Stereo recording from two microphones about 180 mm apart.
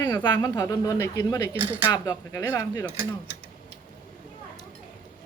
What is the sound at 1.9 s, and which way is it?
Speech, 20° left (ahead or behind).